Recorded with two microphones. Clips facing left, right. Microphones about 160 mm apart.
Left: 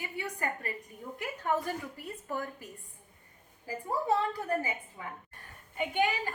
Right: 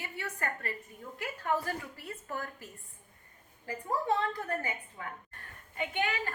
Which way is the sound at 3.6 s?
10° left (ahead or behind).